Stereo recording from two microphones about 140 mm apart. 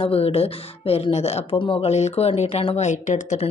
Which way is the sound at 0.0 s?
45° left (ahead or behind).